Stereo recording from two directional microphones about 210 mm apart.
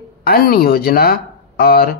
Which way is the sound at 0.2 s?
45° left (ahead or behind).